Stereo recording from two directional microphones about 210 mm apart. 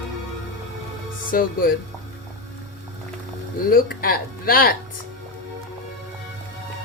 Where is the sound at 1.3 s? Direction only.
45° left (ahead or behind).